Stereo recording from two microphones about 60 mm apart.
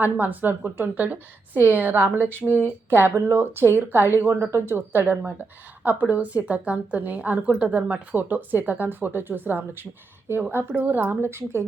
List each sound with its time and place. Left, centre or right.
0.0 s a woman's voice: right
2.5 s a woman's voice: right